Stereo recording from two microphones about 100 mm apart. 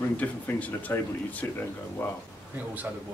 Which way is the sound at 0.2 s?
15° left (ahead or behind).